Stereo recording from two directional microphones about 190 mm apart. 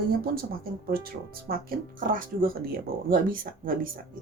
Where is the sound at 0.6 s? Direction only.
50° right (ahead or behind).